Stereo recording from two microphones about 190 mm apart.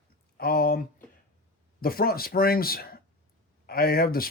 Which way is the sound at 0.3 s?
55° left (ahead or behind).